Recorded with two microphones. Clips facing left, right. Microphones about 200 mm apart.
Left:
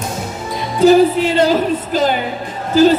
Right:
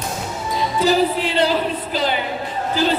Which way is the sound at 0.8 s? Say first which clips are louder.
Left 9 dB; 50° left (ahead or behind).